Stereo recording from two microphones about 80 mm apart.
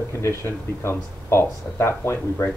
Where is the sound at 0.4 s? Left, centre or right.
Left.